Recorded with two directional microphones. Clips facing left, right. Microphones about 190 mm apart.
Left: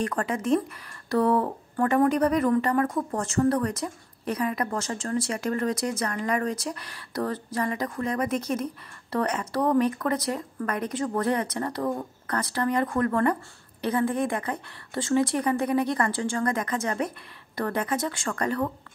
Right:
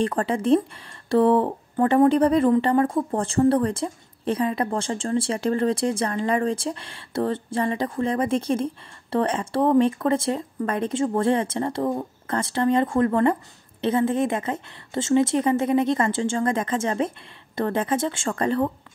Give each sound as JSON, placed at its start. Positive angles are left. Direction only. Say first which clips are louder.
{"t": 0.0, "sound": "speech", "louder": "right 5 dB", "side_deg": -30}